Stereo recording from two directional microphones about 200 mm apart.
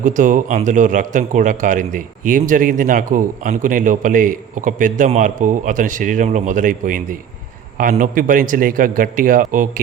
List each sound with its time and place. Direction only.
0.0 s a man's voice: 40° right (ahead or behind)